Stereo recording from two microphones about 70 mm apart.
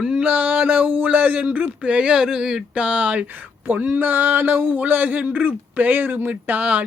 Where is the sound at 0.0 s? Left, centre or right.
Centre.